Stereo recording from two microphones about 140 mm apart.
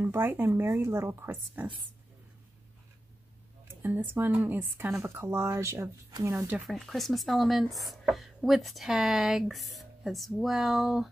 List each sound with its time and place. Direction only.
0.0 s a woman's voice: 15° right (ahead or behind)
3.8 s a woman's voice: 15° right (ahead or behind)
6.7 s speech: centre (ahead or behind)